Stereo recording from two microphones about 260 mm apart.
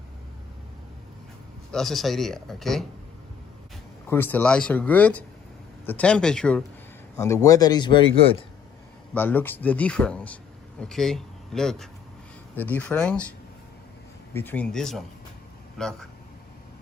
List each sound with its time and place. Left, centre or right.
1.7 s speech: centre
4.1 s a man's voice: centre
9.1 s speech: centre
14.3 s speech: centre